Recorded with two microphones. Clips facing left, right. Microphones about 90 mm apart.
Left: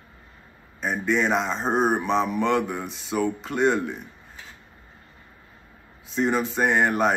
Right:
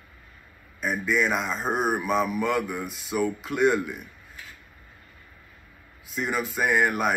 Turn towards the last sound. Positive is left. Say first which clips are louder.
# left 2 dB
turn(degrees=-5)  # may be behind; listen again after turning